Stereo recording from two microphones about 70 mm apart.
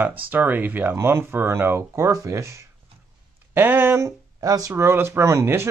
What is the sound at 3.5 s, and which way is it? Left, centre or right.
Speech, right.